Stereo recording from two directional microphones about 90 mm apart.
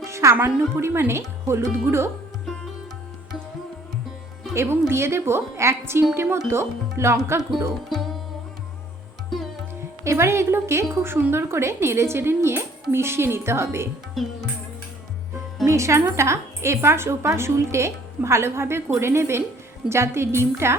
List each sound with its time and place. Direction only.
0.0 s speech: 30° right (ahead or behind)
4.5 s a woman's voice: 30° right (ahead or behind)
7.9 s music: centre (ahead or behind)
9.3 s music: centre (ahead or behind)
10.0 s a woman's voice: 30° right (ahead or behind)
14.2 s music: centre (ahead or behind)
15.6 s a woman's voice: 35° right (ahead or behind)